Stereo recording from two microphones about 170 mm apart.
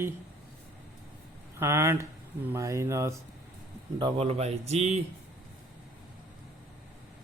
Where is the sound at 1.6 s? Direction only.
15° right (ahead or behind).